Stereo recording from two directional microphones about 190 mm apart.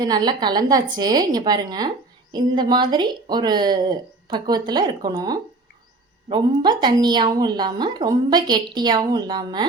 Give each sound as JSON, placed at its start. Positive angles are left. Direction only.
{"t": 0.0, "sound": "a woman's voice", "side_deg": -20}